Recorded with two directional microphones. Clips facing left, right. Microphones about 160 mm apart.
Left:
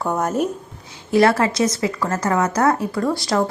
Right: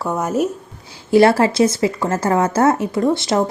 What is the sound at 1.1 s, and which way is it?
A woman's voice, 30° right (ahead or behind).